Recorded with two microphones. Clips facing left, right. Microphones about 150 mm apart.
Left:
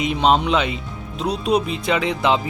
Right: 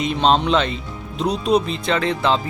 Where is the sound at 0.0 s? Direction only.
10° left (ahead or behind).